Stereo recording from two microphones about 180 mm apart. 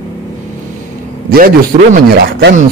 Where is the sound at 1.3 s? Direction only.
55° right (ahead or behind).